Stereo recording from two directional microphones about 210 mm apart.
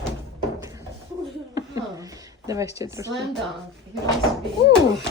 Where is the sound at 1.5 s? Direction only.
15° right (ahead or behind).